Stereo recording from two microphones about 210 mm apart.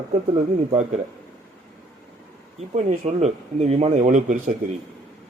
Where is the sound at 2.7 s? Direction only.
35° right (ahead or behind).